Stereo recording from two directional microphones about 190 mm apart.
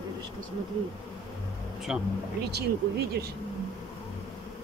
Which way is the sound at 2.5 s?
60° right (ahead or behind).